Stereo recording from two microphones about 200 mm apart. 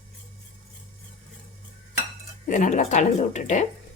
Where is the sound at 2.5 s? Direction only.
35° left (ahead or behind).